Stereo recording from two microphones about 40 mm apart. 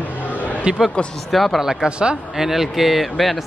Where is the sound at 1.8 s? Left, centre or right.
Right.